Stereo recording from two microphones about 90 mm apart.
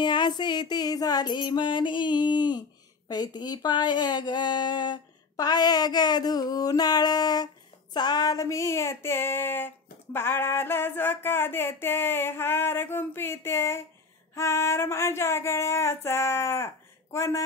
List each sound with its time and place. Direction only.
0.0 s music: 55° left (ahead or behind)
3.1 s speech: 50° left (ahead or behind)
5.3 s music: 45° left (ahead or behind)
7.9 s a sound: 50° left (ahead or behind); by 17.4 s 30° left (ahead or behind)